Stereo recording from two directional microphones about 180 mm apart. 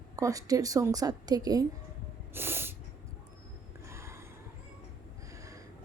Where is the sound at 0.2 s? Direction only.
20° right (ahead or behind).